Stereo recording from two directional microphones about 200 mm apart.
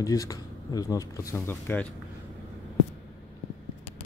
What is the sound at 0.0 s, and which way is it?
Speech, 15° left (ahead or behind).